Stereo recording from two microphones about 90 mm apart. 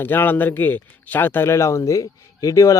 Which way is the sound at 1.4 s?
35° left (ahead or behind).